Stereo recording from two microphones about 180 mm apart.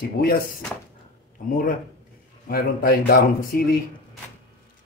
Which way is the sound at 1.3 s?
50° left (ahead or behind).